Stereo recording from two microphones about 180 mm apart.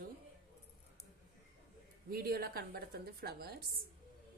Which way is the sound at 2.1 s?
60° right (ahead or behind).